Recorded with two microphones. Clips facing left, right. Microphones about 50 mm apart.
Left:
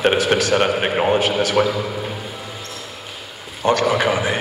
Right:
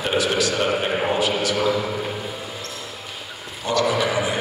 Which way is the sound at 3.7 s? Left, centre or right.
Left.